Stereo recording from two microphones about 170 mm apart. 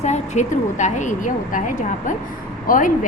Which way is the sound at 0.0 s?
45° left (ahead or behind).